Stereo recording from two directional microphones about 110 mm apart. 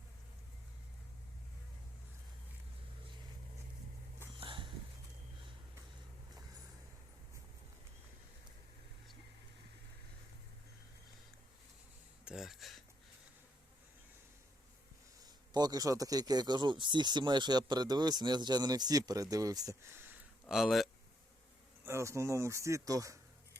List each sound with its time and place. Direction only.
4.4 s a sound: 50° right (ahead or behind)
12.2 s speech: 5° right (ahead or behind)
15.2 s a man's voice: 35° right (ahead or behind); by 20.2 s 20° right (ahead or behind)
20.5 s speech: centre (ahead or behind)
21.8 s speech: 25° right (ahead or behind)